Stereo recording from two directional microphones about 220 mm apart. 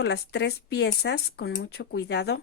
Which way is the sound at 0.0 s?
50° left (ahead or behind).